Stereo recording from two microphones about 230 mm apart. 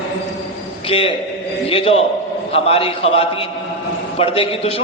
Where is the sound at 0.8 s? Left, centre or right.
Left.